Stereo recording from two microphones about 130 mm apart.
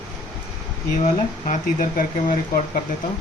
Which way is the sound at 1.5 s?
90° left.